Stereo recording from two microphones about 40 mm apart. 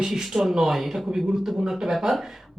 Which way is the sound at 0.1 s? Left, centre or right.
Centre.